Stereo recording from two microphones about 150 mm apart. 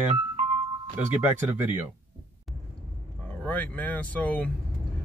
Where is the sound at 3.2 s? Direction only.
10° left (ahead or behind).